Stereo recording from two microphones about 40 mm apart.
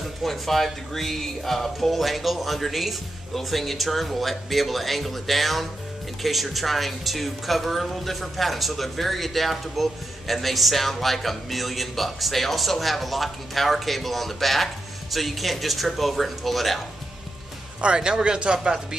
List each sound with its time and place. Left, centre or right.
0.2 s speech: centre
17.8 s speech: right